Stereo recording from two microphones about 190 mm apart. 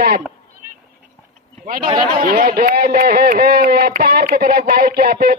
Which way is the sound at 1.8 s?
40° right (ahead or behind).